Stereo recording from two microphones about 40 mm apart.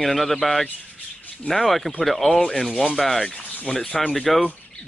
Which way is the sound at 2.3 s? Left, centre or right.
Left.